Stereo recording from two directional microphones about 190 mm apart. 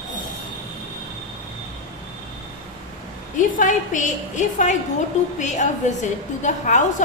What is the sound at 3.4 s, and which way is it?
A woman's voice, 40° left (ahead or behind).